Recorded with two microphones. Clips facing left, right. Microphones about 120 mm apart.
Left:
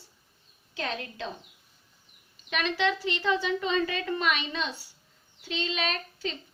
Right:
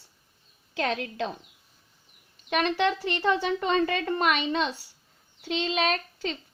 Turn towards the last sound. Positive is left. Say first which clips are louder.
# right 4 dB
turn(degrees=-55)  # may be behind; listen again after turning